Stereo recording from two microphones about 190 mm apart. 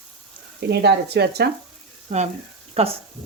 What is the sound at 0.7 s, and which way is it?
Speech, 60° right (ahead or behind).